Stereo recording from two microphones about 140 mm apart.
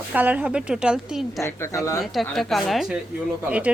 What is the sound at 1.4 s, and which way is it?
Speech, 20° left (ahead or behind).